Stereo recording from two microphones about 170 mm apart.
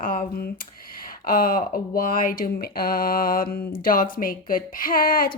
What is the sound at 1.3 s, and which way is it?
Speech, 55° left (ahead or behind).